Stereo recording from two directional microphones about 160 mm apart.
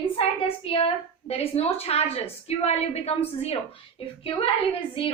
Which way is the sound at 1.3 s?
40° left (ahead or behind).